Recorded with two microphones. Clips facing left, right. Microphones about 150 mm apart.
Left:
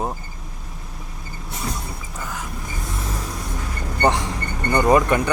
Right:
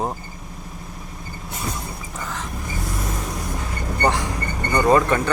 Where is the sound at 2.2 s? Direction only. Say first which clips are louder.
Right 1 dB; 10° left (ahead or behind).